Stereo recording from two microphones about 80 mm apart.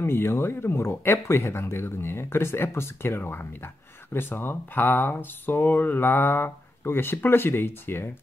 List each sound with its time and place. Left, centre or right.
0.0 s speech: left